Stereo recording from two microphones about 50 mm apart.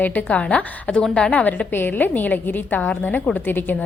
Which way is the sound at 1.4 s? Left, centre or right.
Left.